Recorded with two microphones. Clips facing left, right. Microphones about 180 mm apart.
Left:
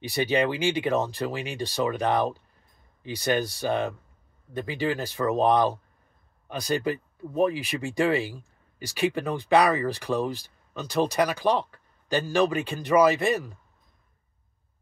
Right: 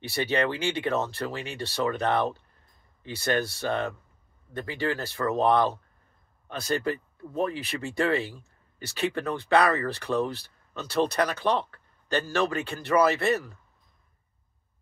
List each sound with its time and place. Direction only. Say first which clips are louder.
0.0 s speech: left 2 dB; 15° left (ahead or behind)